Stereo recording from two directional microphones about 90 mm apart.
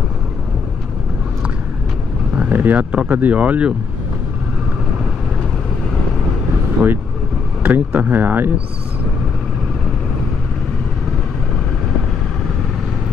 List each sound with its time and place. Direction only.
2.3 s speech: 20° right (ahead or behind)
6.8 s speech: 20° right (ahead or behind)